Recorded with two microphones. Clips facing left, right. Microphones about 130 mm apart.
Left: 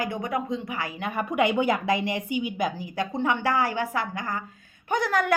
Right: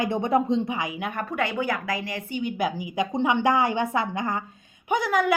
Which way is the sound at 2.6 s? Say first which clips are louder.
Right 2 dB; 10° right (ahead or behind).